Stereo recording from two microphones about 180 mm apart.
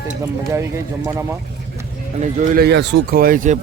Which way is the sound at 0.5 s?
15° right (ahead or behind).